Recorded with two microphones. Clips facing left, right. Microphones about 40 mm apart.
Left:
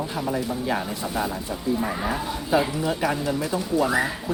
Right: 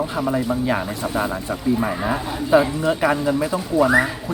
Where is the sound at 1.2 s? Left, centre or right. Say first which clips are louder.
Right 5 dB; right.